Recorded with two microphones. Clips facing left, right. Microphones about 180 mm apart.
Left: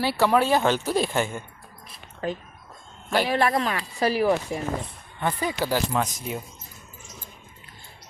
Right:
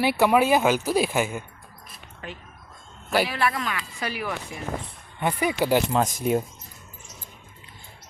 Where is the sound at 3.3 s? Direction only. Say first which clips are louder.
Left 4 dB; 35° left (ahead or behind).